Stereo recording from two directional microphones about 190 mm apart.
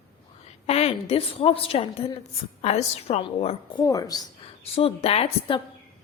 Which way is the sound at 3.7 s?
20° left (ahead or behind).